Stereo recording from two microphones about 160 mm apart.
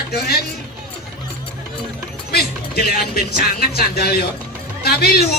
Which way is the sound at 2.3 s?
75° left (ahead or behind).